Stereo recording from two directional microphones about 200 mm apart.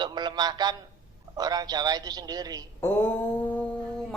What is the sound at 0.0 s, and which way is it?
A man's voice, 20° right (ahead or behind).